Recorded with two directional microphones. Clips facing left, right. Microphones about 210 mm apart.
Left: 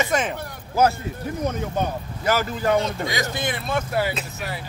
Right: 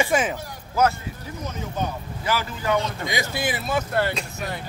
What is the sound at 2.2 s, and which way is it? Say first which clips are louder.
Speech: left 4 dB; 45° left (ahead or behind).